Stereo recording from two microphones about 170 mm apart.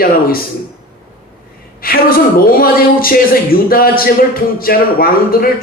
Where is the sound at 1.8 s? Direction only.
60° left (ahead or behind).